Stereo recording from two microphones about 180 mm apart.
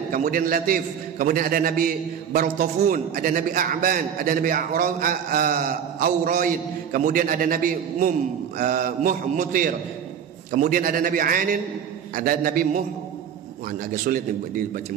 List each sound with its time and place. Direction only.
0.1 s a man's voice: 50° right (ahead or behind)